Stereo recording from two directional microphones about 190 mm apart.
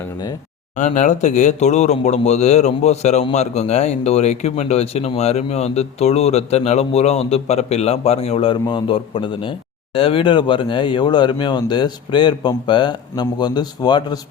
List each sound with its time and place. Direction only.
0.8 s speech: 40° left (ahead or behind); by 14.2 s 20° left (ahead or behind)